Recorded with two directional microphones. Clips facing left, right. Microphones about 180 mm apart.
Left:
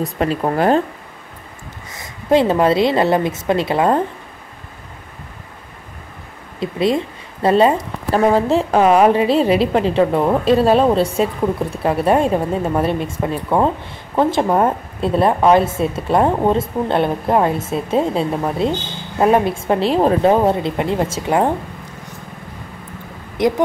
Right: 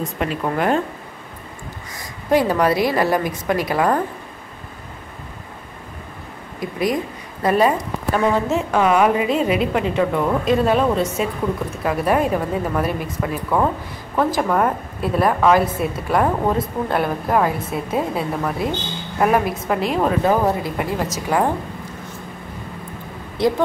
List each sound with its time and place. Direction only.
0.0 s a woman's voice: 35° left (ahead or behind)
2.0 s a woman's voice: 25° left (ahead or behind)
6.6 s a woman's voice: 25° left (ahead or behind)
23.4 s a woman's voice: 20° left (ahead or behind)